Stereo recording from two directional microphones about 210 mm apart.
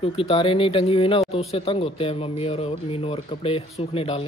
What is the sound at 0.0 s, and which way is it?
Speech, 25° left (ahead or behind).